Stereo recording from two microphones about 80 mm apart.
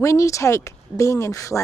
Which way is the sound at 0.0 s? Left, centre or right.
Left.